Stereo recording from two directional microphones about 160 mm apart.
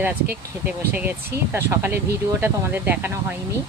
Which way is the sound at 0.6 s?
10° right (ahead or behind).